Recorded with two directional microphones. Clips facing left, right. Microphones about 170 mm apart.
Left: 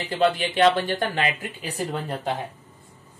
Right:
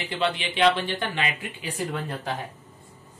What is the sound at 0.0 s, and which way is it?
Speech, 40° left (ahead or behind).